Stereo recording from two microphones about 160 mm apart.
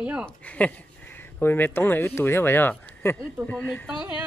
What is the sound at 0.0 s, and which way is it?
Speech, 5° right (ahead or behind).